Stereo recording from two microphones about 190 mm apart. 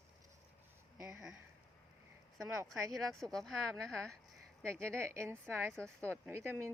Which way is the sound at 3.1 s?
Centre (ahead or behind).